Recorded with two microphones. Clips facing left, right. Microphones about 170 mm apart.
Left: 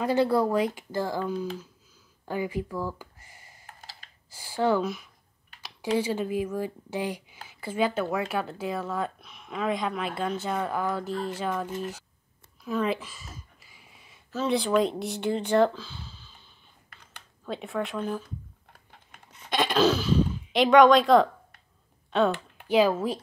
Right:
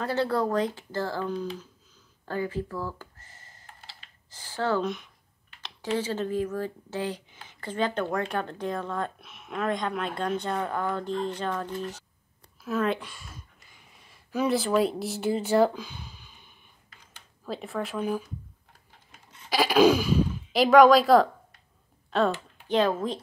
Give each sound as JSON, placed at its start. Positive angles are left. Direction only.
{"t": 0.0, "sound": "speech", "side_deg": 15}
{"t": 2.2, "sound": "a sound", "side_deg": 15}
{"t": 4.3, "sound": "speech", "side_deg": 10}
{"t": 5.9, "sound": "speech", "side_deg": 10}
{"t": 12.6, "sound": "a sound", "side_deg": 0}
{"t": 14.5, "sound": "speech", "side_deg": -5}
{"t": 17.5, "sound": "speech", "side_deg": 0}
{"t": 19.1, "sound": "a sound", "side_deg": 55}
{"t": 19.5, "sound": "speech", "side_deg": -5}
{"t": 22.7, "sound": "speech", "side_deg": 10}